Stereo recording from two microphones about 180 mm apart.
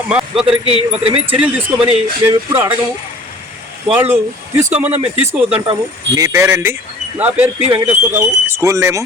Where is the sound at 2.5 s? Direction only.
15° right (ahead or behind).